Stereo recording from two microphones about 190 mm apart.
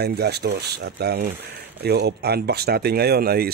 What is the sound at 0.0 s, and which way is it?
Speech, 60° right (ahead or behind).